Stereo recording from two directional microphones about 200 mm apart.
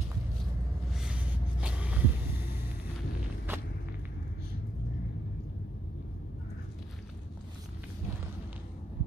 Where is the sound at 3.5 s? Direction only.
10° right (ahead or behind).